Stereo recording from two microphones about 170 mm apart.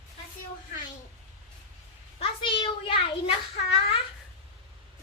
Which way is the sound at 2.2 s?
30° left (ahead or behind).